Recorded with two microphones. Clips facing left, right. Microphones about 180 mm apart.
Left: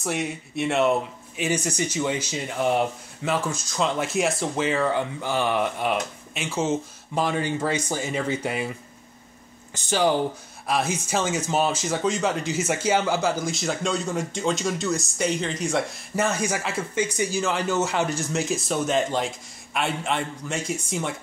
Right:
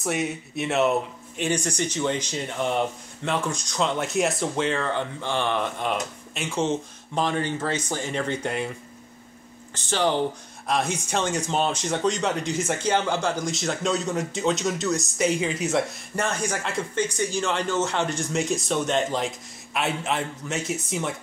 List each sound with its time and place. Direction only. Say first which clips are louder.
0.0 s speech: right 1 dB; centre (ahead or behind)
9.8 s speech: left 2 dB; 10° left (ahead or behind)